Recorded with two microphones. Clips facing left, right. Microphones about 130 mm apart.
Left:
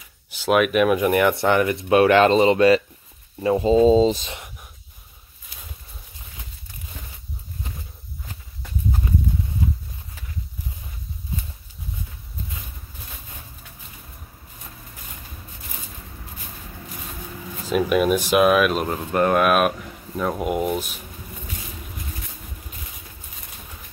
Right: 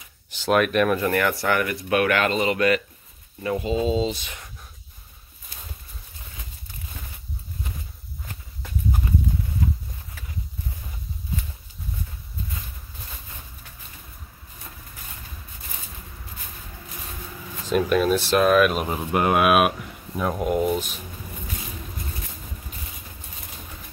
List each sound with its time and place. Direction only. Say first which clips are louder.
0.4 s speech: left 2 dB; 5° left (ahead or behind)
0.9 s speech: left 4 dB; 15° left (ahead or behind); by 4.3 s 35° left (ahead or behind)
4.3 s a sound: left 5 dB; 20° left (ahead or behind)
17.6 s speech: left 1 dB; 5° left (ahead or behind)